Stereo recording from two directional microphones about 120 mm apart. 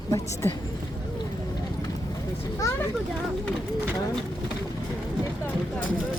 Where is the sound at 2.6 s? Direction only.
20° left (ahead or behind).